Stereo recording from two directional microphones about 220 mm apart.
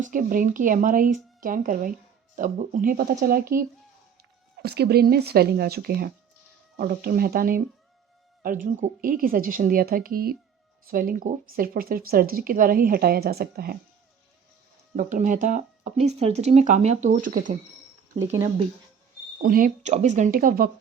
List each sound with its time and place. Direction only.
0.0 s speech: 40° right (ahead or behind)
14.9 s speech: 35° right (ahead or behind)
19.4 s speech: 40° right (ahead or behind)